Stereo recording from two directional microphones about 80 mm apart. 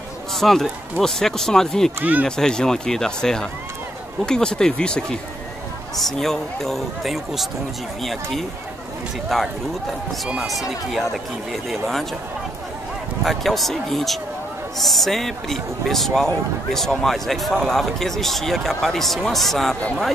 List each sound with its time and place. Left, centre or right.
0.3 s speech: centre
2.0 s speech: right
2.2 s speech: centre
13.2 s speech: centre